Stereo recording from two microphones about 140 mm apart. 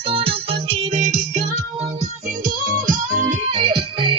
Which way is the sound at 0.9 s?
60° right (ahead or behind).